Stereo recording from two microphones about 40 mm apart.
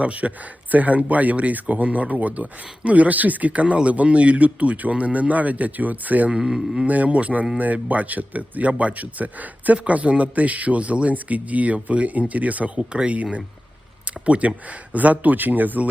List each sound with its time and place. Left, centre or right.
0.0 s speech: right
6.3 s speech: centre
6.8 s speech: right
12.7 s speech: right
14.3 s speech: right